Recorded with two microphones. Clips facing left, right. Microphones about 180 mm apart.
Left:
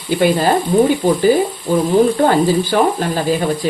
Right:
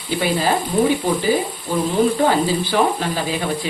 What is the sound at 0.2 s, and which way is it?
Speech, 45° left (ahead or behind).